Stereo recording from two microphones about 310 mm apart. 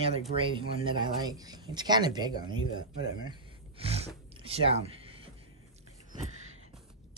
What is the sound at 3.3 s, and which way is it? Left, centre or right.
Gasp, centre.